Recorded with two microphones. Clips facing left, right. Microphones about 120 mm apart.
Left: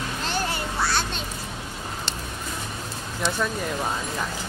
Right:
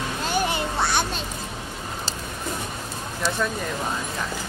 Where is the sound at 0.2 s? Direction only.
15° right (ahead or behind).